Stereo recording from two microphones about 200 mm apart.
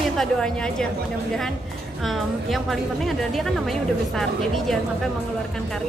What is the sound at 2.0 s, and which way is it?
A woman's voice, centre (ahead or behind).